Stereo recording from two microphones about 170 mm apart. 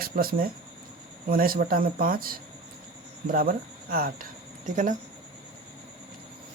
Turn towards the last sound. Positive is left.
turn(degrees=-50)  # may be behind; listen again after turning